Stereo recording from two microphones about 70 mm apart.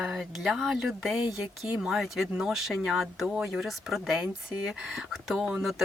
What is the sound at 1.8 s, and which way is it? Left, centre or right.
Speech, centre.